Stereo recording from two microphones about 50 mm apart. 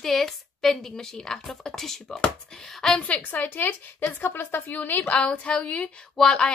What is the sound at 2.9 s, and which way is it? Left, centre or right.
A woman's voice, left.